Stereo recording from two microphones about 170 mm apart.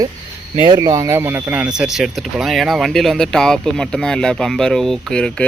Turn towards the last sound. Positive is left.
turn(degrees=5)  # may be behind; listen again after turning